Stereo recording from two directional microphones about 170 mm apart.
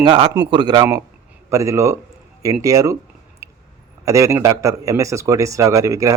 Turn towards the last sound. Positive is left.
turn(degrees=-20)  # may be behind; listen again after turning